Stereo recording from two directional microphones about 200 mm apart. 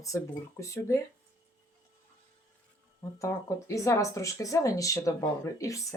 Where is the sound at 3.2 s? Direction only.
15° left (ahead or behind).